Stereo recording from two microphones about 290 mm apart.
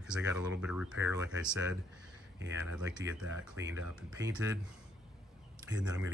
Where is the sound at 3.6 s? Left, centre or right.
Right.